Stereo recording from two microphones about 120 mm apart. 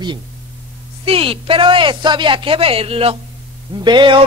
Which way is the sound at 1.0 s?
50° right (ahead or behind).